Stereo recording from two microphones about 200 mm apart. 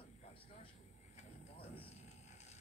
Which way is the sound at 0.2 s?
30° left (ahead or behind).